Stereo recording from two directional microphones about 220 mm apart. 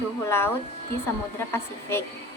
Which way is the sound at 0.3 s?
10° left (ahead or behind).